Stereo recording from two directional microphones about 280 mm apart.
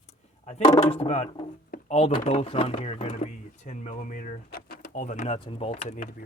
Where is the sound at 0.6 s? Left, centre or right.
Centre.